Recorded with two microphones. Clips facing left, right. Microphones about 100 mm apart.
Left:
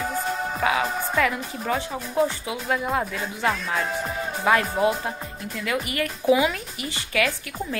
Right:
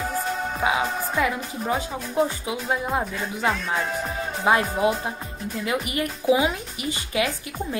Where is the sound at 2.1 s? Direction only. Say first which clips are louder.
Even; 20° right (ahead or behind).